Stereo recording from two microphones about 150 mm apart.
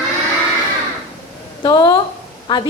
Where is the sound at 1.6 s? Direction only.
25° left (ahead or behind).